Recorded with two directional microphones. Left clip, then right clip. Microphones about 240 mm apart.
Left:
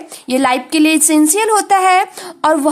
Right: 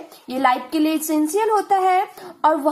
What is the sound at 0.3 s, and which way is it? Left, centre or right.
A woman's voice, left.